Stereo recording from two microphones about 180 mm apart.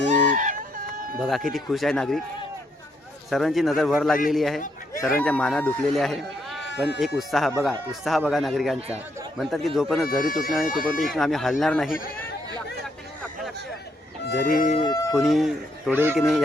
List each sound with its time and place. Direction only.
0.0 s a sound: 45° right (ahead or behind)
1.2 s speech: centre (ahead or behind)
3.2 s speech: centre (ahead or behind)
4.6 s a sound: 50° left (ahead or behind)
5.1 s speech: 5° left (ahead or behind)
14.4 s speech: 45° left (ahead or behind)
15.1 s speech: centre (ahead or behind)